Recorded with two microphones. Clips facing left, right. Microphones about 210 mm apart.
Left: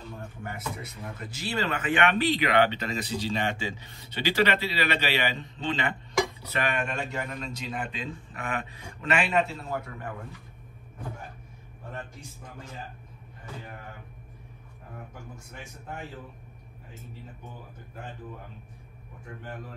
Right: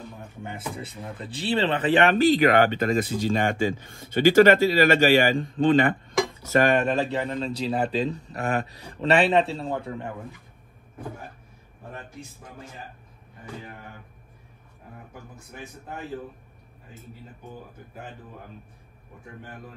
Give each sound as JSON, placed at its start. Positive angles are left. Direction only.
{"t": 0.4, "sound": "a man's voice", "side_deg": -30}